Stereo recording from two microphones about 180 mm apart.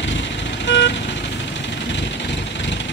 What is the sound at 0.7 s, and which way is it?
Vehicle, 75° left (ahead or behind).